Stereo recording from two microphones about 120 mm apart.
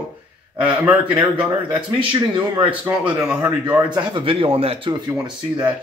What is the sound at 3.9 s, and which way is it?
Speech, 45° right (ahead or behind).